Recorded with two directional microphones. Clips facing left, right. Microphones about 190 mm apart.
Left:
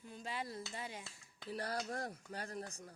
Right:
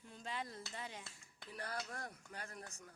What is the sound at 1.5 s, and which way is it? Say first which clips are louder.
Speech: left 6 dB; 35° left (ahead or behind).